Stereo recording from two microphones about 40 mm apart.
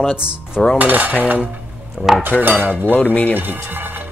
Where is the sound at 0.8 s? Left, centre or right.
Right.